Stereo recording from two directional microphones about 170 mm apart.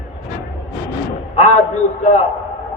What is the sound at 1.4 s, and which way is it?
Speech, 40° left (ahead or behind).